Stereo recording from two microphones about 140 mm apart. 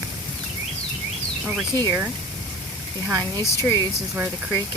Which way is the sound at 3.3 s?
20° left (ahead or behind).